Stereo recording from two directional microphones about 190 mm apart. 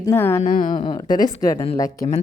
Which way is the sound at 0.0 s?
10° left (ahead or behind).